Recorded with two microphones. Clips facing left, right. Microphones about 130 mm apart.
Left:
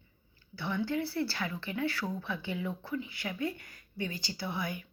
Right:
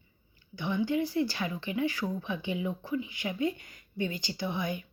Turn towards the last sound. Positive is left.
turn(degrees=-20)  # may be behind; listen again after turning